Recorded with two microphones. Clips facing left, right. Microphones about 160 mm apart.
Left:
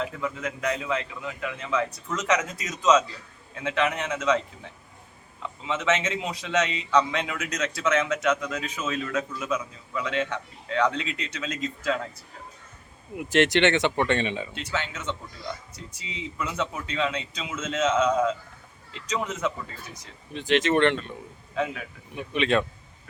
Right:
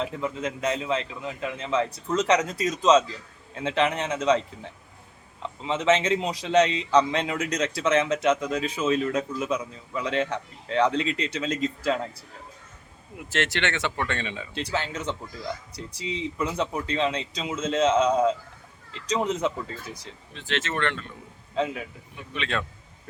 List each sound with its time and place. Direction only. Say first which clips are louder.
0.0 s a man's voice: right 2 dB; 25° right (ahead or behind)
13.1 s speech: left 7 dB; 15° left (ahead or behind)
14.5 s a man's voice: right 3 dB; 35° right (ahead or behind)
20.3 s speech: left 8 dB; 15° left (ahead or behind)
21.5 s a man's voice: right 2 dB; 30° right (ahead or behind)
22.1 s speech: left 7 dB; 20° left (ahead or behind)